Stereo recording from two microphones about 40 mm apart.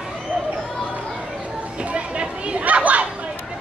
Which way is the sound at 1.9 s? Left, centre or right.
Right.